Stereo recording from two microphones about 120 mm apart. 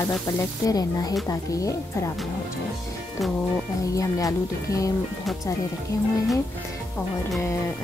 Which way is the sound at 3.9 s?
30° left (ahead or behind).